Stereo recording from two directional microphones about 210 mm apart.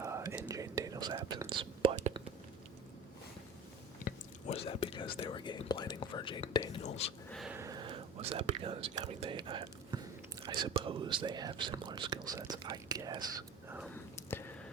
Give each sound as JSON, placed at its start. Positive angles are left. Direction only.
{"t": 0.0, "sound": "whispering", "side_deg": -15}
{"t": 4.0, "sound": "whispering", "side_deg": 30}
{"t": 6.7, "sound": "speech", "side_deg": 30}
{"t": 7.3, "sound": "a sound", "side_deg": 0}
{"t": 7.5, "sound": "whispering", "side_deg": -15}
{"t": 10.4, "sound": "speech", "side_deg": -20}
{"t": 13.8, "sound": "a sound", "side_deg": 10}